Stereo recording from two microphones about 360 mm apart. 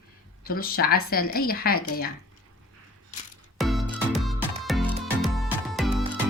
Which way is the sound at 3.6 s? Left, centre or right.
Centre.